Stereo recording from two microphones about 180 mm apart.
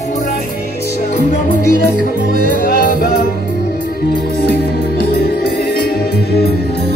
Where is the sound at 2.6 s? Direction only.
55° left (ahead or behind).